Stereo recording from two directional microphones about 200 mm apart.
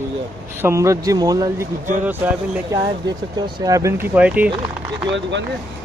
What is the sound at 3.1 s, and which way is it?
Speech, 20° right (ahead or behind).